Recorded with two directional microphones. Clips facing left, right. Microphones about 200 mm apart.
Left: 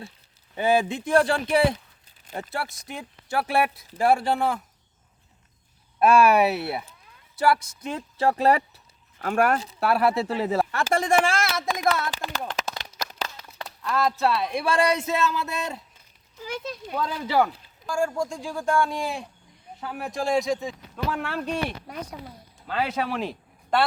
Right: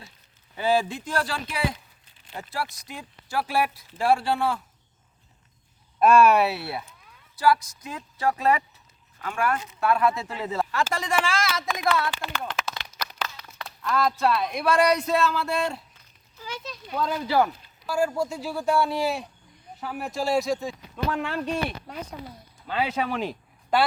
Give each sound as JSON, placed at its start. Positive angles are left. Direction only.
{"t": 0.5, "sound": "speech", "side_deg": 20}
{"t": 6.0, "sound": "speech", "side_deg": 10}
{"t": 9.2, "sound": "speech", "side_deg": 45}
{"t": 9.6, "sound": "speech", "side_deg": 35}
{"t": 10.7, "sound": "speech", "side_deg": 50}
{"t": 11.7, "sound": "speech", "side_deg": 40}
{"t": 12.1, "sound": "a sound", "side_deg": 40}
{"t": 13.6, "sound": "a sound", "side_deg": 25}
{"t": 14.5, "sound": "speech", "side_deg": 30}
{"t": 17.8, "sound": "a man's voice", "side_deg": -5}